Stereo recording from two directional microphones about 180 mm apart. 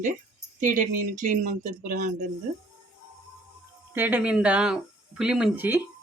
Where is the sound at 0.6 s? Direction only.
45° right (ahead or behind).